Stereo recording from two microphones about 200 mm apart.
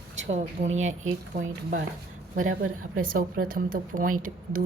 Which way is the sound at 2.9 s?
45° right (ahead or behind).